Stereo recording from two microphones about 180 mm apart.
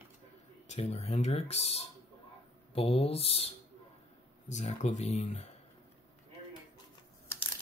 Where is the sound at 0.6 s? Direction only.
35° left (ahead or behind).